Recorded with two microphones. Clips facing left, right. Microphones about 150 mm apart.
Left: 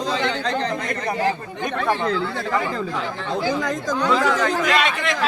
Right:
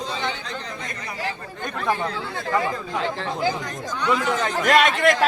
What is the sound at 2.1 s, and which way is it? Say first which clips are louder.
Speech: left 4 dB; 90° left.